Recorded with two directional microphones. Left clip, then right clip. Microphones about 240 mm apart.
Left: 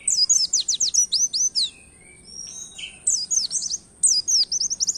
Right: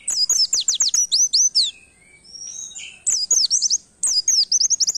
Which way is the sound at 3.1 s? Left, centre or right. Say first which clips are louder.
Right 5 dB; right.